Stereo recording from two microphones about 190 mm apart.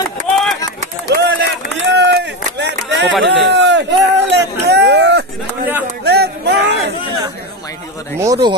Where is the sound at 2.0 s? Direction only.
65° right (ahead or behind).